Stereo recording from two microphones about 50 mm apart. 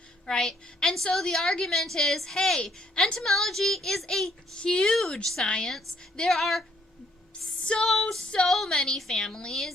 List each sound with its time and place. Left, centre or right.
0.3 s a woman's voice: centre
4.5 s a woman's voice: centre
6.1 s speech: centre
7.6 s music: centre
7.9 s a woman's voice: centre